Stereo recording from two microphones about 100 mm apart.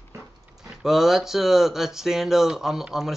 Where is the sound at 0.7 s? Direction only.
5° right (ahead or behind).